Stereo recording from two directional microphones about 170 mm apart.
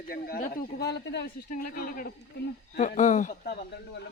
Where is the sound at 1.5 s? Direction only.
55° left (ahead or behind).